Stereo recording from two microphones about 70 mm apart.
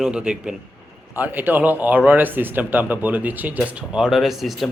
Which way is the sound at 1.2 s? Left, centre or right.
Right.